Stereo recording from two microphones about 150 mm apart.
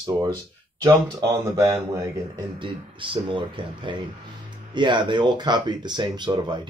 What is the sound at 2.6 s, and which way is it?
Speech, 35° right (ahead or behind).